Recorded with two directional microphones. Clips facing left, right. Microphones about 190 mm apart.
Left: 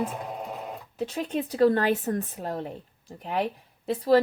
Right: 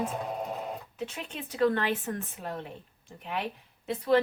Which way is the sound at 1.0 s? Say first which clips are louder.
Left 14 dB; 35° left (ahead or behind).